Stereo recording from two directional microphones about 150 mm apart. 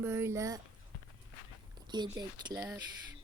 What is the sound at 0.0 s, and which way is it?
Speech, 15° right (ahead or behind).